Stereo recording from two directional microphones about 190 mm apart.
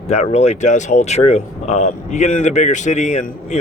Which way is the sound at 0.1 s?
35° left (ahead or behind).